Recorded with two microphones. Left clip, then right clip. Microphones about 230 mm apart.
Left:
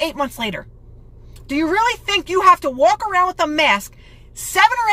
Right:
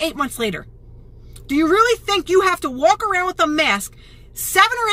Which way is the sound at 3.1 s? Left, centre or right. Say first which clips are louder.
Left 1 dB; centre.